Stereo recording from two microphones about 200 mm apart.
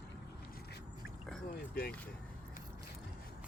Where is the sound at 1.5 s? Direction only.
45° left (ahead or behind).